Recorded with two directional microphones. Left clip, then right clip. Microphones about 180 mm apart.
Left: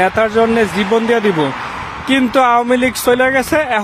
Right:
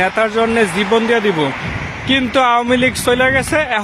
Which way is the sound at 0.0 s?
40° left (ahead or behind).